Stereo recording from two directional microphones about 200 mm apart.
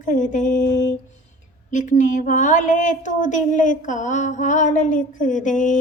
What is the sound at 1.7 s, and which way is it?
A woman's voice, 40° left (ahead or behind).